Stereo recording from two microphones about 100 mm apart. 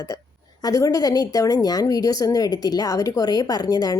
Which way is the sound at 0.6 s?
35° left (ahead or behind).